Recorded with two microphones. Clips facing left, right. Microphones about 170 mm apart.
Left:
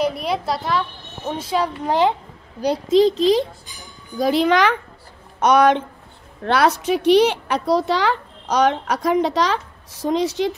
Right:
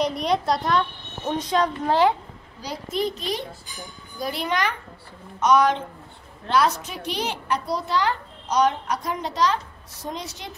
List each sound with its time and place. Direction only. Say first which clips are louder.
0.0 s a woman's voice: left 1 dB; 5° left (ahead or behind)
2.6 s a child's voice: left 12 dB; 80° left
5.4 s a woman's voice: left 4 dB; 65° left (ahead or behind); by 10.5 s 90° left